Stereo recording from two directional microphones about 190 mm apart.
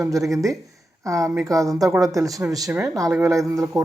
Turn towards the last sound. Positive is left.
turn(degrees=-15)  # may be behind; listen again after turning